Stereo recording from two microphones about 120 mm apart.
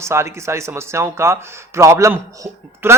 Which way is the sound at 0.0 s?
25° right (ahead or behind).